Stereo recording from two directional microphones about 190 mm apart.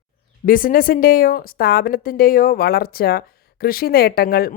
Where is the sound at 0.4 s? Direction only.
50° left (ahead or behind).